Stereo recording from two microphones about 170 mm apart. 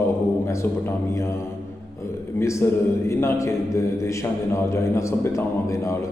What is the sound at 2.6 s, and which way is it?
A man's voice, 15° left (ahead or behind).